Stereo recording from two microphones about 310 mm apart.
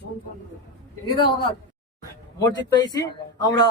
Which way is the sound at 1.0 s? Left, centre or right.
Centre.